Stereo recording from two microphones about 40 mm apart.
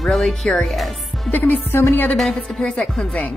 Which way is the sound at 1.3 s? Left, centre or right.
Left.